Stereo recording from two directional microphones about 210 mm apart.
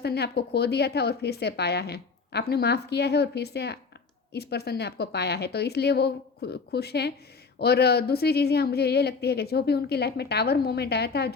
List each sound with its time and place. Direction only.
0.0 s a woman's voice: 50° left (ahead or behind)